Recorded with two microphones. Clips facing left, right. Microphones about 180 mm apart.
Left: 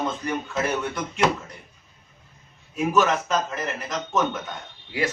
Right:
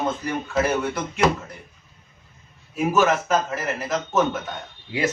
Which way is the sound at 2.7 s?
5° right (ahead or behind).